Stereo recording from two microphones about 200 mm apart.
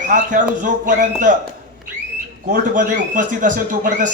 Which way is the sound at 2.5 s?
40° right (ahead or behind).